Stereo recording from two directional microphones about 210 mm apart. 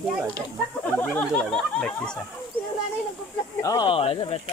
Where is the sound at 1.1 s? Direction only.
5° left (ahead or behind).